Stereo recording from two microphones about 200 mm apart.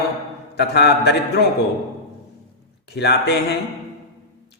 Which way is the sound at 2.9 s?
55° left (ahead or behind).